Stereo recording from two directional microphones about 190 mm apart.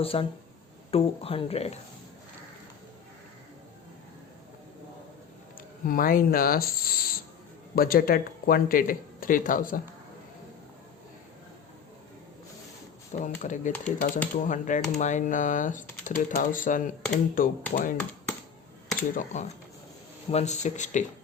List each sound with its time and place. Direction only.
0.0 s speech: 30° left (ahead or behind)
5.5 s speech: 45° left (ahead or behind)
13.1 s speech: 40° left (ahead or behind)
19.1 s speech: 40° left (ahead or behind)